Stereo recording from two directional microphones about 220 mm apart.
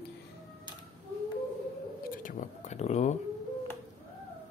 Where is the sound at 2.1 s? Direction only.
35° left (ahead or behind).